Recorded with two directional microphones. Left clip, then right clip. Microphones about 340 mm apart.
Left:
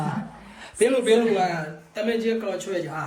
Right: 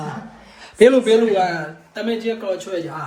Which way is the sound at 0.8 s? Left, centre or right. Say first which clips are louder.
Right 7 dB; centre.